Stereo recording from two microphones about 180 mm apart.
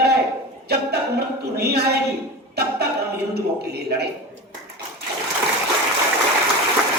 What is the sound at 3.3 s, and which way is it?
Speech, 65° right (ahead or behind).